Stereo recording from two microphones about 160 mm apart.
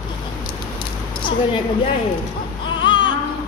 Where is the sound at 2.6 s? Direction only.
30° left (ahead or behind).